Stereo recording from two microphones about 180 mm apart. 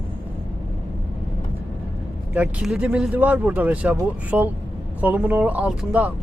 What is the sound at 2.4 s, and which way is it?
Speech, 5° right (ahead or behind).